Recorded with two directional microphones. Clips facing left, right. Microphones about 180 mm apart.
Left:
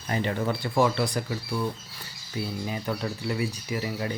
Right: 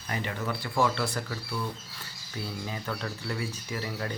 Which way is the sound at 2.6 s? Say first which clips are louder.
Left 5 dB; 20° left (ahead or behind).